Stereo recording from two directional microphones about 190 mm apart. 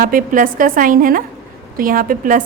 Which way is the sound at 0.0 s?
45° right (ahead or behind).